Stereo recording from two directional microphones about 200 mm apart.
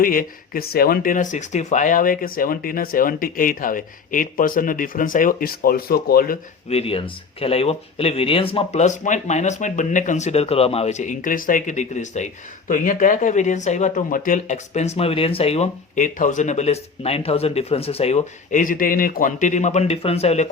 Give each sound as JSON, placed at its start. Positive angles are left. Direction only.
{"t": 0.0, "sound": "speech", "side_deg": 45}
{"t": 6.7, "sound": "speech", "side_deg": 30}